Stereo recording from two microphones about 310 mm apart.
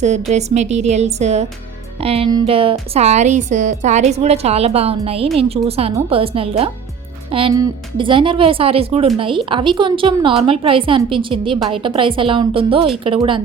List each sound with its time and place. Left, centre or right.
0.0 s a woman's voice: right